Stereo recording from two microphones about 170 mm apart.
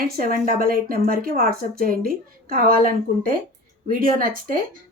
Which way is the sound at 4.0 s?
55° right (ahead or behind).